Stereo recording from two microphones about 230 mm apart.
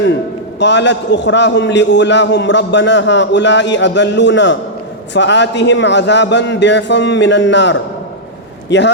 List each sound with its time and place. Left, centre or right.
0.6 s a man's voice: left